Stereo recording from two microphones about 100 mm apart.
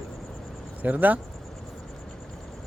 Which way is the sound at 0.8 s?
15° right (ahead or behind).